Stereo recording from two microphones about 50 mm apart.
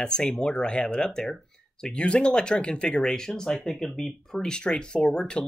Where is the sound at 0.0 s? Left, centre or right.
Centre.